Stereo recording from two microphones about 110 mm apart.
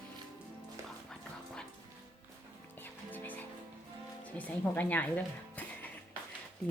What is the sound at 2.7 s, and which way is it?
Music, 20° left (ahead or behind).